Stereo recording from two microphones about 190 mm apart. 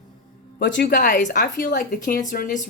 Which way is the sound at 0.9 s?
45° left (ahead or behind).